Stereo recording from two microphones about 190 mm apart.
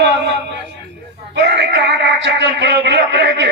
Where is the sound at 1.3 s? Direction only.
65° right (ahead or behind).